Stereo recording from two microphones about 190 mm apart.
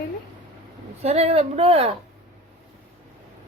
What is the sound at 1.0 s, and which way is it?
Speech, 35° right (ahead or behind).